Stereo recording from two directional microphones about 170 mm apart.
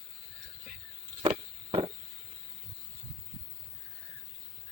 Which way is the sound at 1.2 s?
35° right (ahead or behind).